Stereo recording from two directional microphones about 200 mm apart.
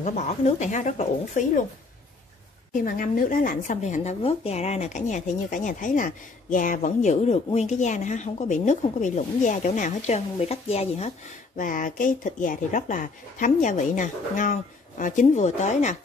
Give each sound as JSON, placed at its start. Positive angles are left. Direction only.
{"t": 0.0, "sound": "speech", "side_deg": 35}
{"t": 2.8, "sound": "speech", "side_deg": 45}